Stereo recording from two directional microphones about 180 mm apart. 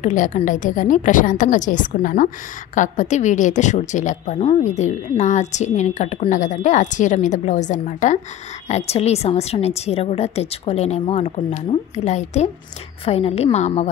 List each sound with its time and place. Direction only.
0.0 s a woman's voice: 45° left (ahead or behind)